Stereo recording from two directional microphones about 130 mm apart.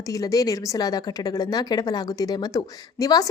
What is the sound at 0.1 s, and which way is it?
A woman's voice, 25° left (ahead or behind).